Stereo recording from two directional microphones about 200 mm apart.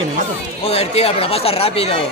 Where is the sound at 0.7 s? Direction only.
30° left (ahead or behind).